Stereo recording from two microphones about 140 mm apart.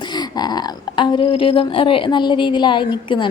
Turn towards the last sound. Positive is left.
turn(degrees=35)  # may be behind; listen again after turning